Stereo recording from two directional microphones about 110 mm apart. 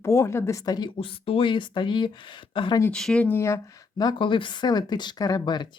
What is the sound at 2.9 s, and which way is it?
Speech, 5° left (ahead or behind).